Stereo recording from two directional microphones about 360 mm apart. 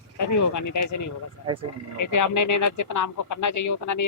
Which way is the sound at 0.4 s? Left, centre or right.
Left.